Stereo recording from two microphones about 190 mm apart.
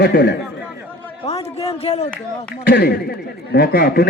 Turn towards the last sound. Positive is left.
turn(degrees=55)  # may be behind; listen again after turning